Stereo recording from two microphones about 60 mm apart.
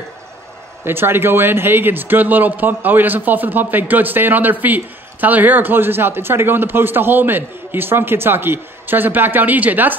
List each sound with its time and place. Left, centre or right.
0.8 s speech: right